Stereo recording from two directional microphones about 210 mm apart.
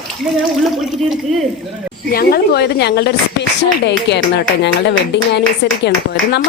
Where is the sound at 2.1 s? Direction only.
45° left (ahead or behind).